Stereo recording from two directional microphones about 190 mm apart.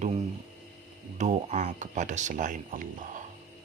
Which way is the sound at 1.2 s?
40° right (ahead or behind).